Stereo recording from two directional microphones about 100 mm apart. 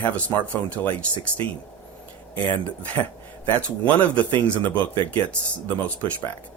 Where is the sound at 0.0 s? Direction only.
15° left (ahead or behind).